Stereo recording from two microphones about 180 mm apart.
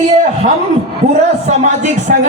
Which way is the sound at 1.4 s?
40° right (ahead or behind).